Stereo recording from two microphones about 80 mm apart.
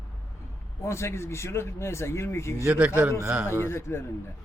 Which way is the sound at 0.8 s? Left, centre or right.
Left.